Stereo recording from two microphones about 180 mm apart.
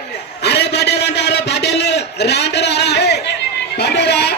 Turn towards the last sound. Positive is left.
turn(degrees=65)  # may be behind; listen again after turning